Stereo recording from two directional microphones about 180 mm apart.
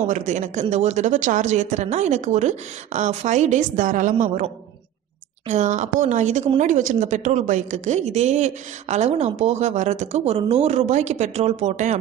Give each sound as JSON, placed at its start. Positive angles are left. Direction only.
{"t": 0.0, "sound": "a woman's voice", "side_deg": -40}
{"t": 5.5, "sound": "a woman's voice", "side_deg": -40}